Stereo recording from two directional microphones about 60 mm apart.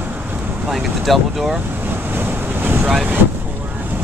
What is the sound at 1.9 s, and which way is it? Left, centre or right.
Boat, right.